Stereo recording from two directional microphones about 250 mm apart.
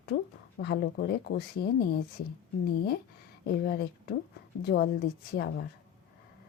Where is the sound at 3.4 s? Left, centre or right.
Left.